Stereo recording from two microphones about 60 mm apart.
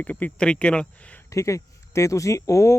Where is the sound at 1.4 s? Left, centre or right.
Left.